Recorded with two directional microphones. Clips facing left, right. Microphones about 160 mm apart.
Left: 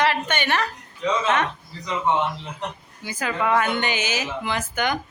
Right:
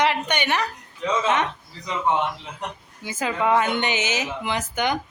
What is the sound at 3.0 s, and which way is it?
Speech, 20° right (ahead or behind).